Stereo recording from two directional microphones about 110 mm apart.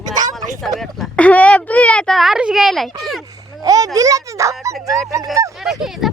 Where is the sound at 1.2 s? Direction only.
15° left (ahead or behind).